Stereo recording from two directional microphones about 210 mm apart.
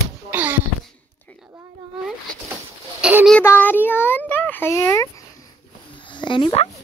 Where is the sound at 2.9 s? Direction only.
5° right (ahead or behind).